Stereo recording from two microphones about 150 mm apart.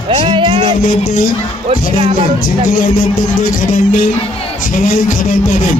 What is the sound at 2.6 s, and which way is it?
A man's voice, 65° left (ahead or behind).